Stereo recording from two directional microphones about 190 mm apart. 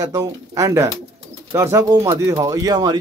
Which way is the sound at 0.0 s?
20° right (ahead or behind).